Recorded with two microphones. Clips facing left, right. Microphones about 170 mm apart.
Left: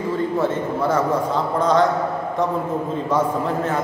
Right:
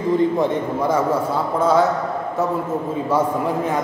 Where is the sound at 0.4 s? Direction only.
15° right (ahead or behind).